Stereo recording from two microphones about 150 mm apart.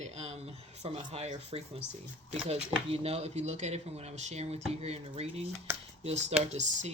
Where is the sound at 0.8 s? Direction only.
45° right (ahead or behind).